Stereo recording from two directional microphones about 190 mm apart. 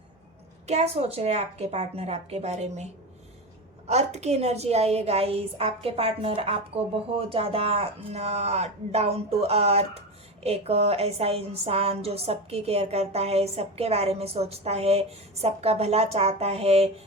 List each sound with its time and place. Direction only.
0.7 s speech: 35° right (ahead or behind)